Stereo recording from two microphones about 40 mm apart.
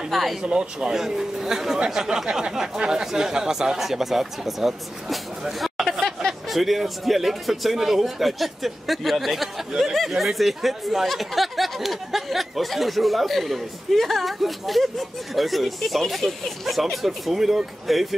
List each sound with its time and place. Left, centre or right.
0.1 s speech: centre
0.4 s speech: centre
6.2 s a sound: centre
6.5 s speech: centre